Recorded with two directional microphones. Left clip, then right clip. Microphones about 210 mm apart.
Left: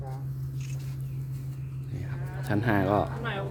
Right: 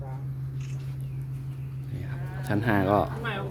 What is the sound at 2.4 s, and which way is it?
Speech, centre (ahead or behind).